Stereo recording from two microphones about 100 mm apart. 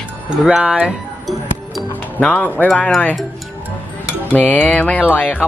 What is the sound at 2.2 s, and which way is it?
Music, 15° left (ahead or behind).